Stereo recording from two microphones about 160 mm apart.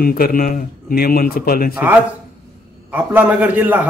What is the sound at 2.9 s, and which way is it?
Speech, 10° right (ahead or behind).